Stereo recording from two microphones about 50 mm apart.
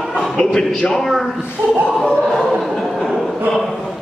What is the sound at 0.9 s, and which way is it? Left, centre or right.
Speech, centre.